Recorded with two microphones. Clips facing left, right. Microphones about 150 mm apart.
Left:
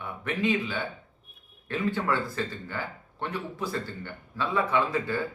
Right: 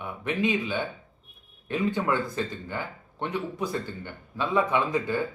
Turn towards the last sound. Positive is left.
turn(degrees=-20)  # may be behind; listen again after turning